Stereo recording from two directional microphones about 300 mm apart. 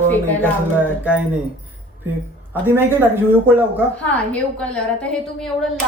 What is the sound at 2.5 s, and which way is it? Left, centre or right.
Speech, centre.